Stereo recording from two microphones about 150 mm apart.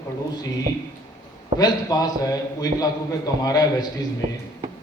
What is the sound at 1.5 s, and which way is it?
A man's voice, 25° left (ahead or behind).